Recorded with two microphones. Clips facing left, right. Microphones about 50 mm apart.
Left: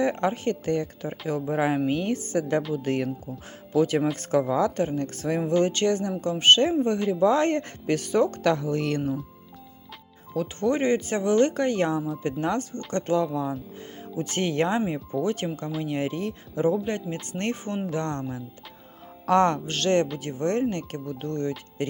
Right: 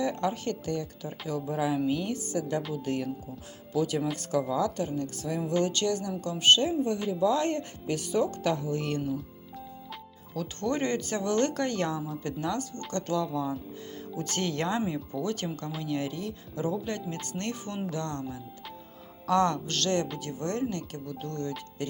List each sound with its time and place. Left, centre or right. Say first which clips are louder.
0.0 s a woman's voice: left 5 dB; left
6.4 s a woman's voice: left 4 dB; left
8.5 s speech: left 4 dB; left
10.3 s a woman's voice: left 6 dB; left